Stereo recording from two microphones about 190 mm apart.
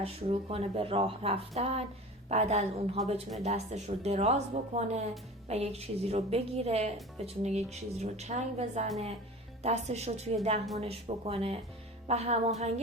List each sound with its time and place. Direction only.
0.0 s a woman's voice: 35° right (ahead or behind)